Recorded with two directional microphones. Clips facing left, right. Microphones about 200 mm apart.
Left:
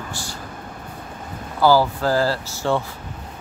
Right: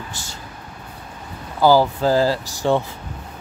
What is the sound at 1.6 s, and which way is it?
Speech, 15° right (ahead or behind).